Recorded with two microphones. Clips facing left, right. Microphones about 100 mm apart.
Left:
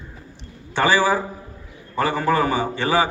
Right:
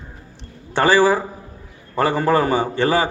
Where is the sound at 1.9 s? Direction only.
45° right (ahead or behind).